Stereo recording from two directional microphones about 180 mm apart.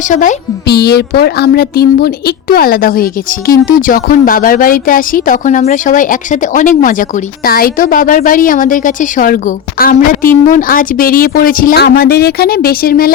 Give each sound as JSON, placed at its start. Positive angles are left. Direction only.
{"t": 0.1, "sound": "a woman's voice", "side_deg": 45}
{"t": 0.7, "sound": "a woman's voice", "side_deg": 65}